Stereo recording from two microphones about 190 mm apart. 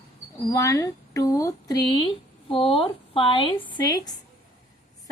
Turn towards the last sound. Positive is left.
turn(degrees=20)  # may be behind; listen again after turning